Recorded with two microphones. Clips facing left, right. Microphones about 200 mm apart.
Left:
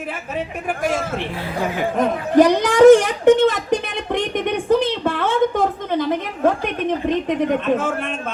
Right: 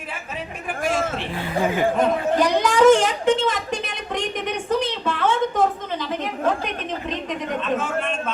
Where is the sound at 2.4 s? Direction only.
55° left (ahead or behind).